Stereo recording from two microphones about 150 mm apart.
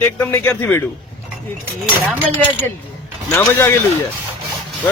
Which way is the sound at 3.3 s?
15° left (ahead or behind).